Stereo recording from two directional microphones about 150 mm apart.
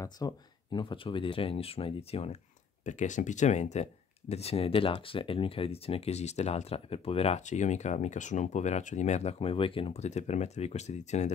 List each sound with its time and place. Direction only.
0.0 s speech: 30° left (ahead or behind)
2.8 s speech: 55° left (ahead or behind)